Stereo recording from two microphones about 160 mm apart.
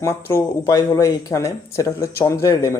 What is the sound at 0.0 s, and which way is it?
Speech, 15° left (ahead or behind).